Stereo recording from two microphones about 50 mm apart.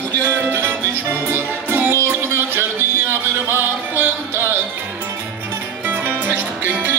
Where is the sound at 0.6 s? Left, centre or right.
Right.